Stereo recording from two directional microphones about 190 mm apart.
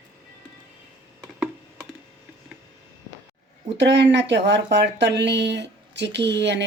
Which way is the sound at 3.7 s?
65° right (ahead or behind).